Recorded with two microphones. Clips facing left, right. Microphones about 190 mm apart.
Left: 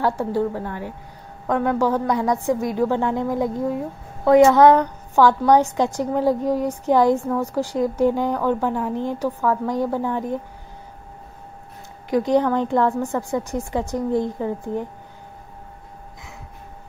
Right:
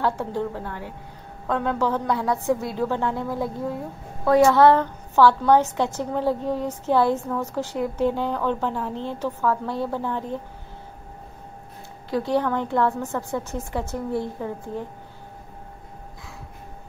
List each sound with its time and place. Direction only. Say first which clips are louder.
0.0 s a woman's voice: left 4 dB; 10° left (ahead or behind)
12.1 s a woman's voice: left 5 dB; 15° left (ahead or behind)